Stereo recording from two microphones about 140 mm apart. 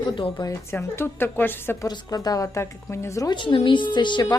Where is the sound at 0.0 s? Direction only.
35° left (ahead or behind).